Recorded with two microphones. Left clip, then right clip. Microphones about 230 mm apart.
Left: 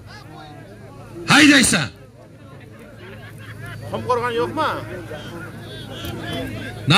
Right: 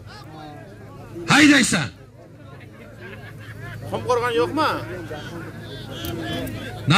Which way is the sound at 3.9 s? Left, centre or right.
Right.